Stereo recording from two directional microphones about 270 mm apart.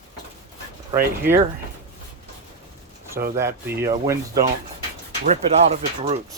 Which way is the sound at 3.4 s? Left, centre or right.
Centre.